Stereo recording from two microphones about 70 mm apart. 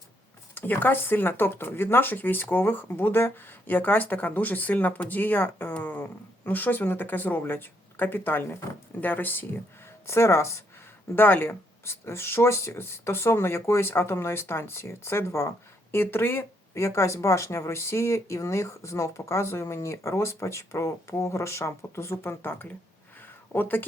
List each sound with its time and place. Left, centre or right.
0.5 s speech: left
10.1 s speech: left
11.1 s speech: left
16.7 s speech: left
23.2 s a sound: left